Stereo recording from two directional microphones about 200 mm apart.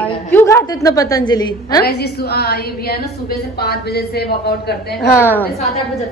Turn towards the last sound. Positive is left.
turn(degrees=10)  # may be behind; listen again after turning